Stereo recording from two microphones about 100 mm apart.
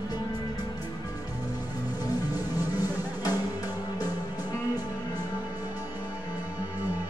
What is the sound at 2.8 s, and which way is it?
Music, 40° left (ahead or behind).